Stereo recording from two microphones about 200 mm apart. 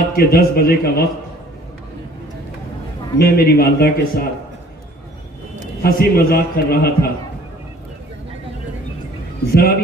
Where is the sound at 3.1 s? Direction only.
50° left (ahead or behind).